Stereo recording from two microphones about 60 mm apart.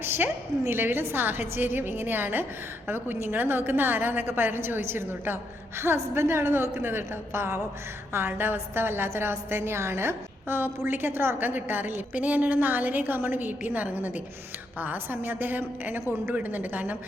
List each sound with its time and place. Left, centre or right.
0.0 s a sound: right
0.7 s a woman's voice: right
12.1 s a woman's voice: right